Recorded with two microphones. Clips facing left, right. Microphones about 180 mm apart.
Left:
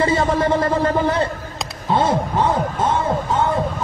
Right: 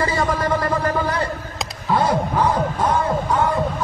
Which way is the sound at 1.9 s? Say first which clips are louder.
Left 1 dB; 25° left (ahead or behind).